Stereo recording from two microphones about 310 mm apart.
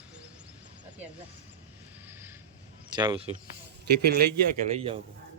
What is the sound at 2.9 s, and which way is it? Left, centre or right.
Speech, centre.